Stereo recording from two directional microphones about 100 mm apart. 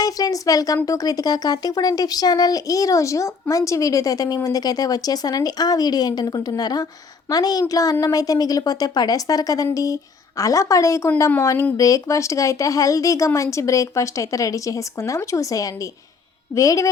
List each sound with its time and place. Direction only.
0.0 s a woman's voice: 40° left (ahead or behind)